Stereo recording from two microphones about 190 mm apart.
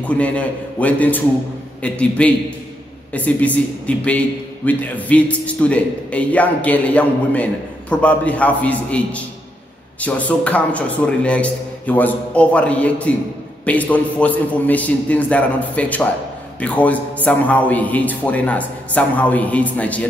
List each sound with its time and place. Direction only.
0.0 s a man's voice: 5° left (ahead or behind)